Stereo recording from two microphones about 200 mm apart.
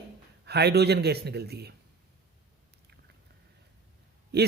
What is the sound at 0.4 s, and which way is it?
A man's voice, 55° right (ahead or behind).